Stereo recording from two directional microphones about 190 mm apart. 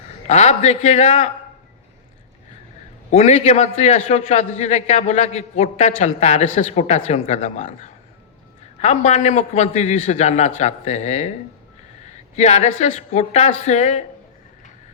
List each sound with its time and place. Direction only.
0.3 s a man's voice: 35° left (ahead or behind)
3.1 s a man's voice: 35° left (ahead or behind)
12.0 s a sound: 35° left (ahead or behind)
12.8 s a man's voice: 35° left (ahead or behind)